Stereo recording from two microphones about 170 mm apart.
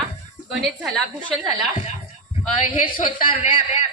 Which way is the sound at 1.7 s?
35° left (ahead or behind).